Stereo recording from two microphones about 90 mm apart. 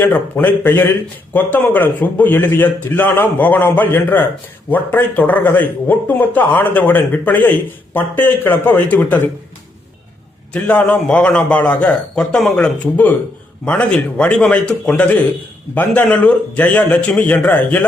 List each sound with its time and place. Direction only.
0.0 s speech: 20° left (ahead or behind)
10.5 s a man's voice: 15° left (ahead or behind)